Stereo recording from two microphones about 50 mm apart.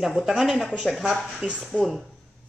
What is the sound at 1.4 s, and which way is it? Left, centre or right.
Speech, centre.